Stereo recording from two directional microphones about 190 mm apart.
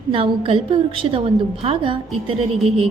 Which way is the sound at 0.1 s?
30° right (ahead or behind).